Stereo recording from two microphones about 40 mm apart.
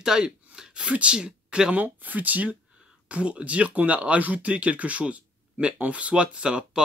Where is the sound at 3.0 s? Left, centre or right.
Right.